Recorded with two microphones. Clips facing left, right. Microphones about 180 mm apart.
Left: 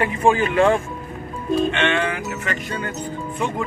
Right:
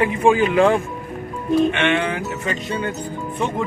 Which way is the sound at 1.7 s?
15° right (ahead or behind).